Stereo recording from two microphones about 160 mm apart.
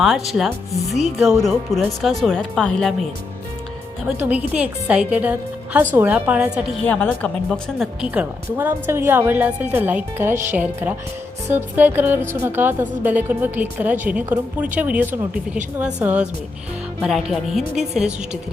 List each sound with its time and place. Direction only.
0.0 s speech: centre (ahead or behind)
4.2 s speech: 10° right (ahead or behind)
6.8 s speech: 10° left (ahead or behind)
8.0 s speech: 10° right (ahead or behind)